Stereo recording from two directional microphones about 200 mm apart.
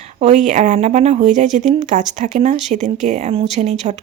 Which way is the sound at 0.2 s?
35° right (ahead or behind).